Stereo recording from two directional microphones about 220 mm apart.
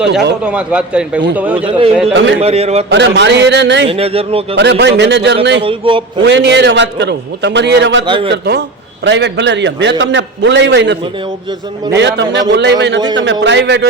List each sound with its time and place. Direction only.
0.1 s a man's voice: 50° right (ahead or behind)
0.4 s a man's voice: 5° right (ahead or behind)
1.5 s speech: 25° right (ahead or behind)
2.1 s a man's voice: 50° right (ahead or behind)
2.4 s speech: 30° right (ahead or behind)
2.9 s a man's voice: 50° right (ahead or behind)
3.8 s speech: 25° right (ahead or behind)
4.5 s a man's voice: 50° right (ahead or behind)
5.6 s speech: 25° right (ahead or behind)
6.2 s a man's voice: 55° right (ahead or behind)
8.0 s speech: 20° right (ahead or behind)
8.3 s a man's voice: 50° right (ahead or behind)